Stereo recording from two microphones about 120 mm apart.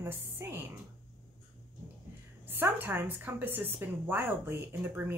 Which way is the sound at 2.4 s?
15° right (ahead or behind).